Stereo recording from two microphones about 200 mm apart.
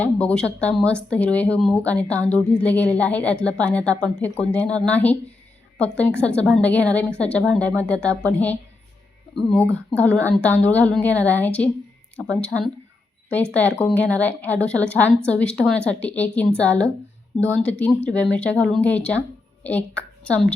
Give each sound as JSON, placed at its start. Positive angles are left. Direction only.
{"t": 0.0, "sound": "speech", "side_deg": 5}
{"t": 6.2, "sound": "a woman's voice", "side_deg": 5}
{"t": 10.0, "sound": "a woman's voice", "side_deg": 5}